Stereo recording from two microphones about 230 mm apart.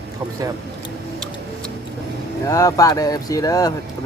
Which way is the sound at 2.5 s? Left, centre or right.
Centre.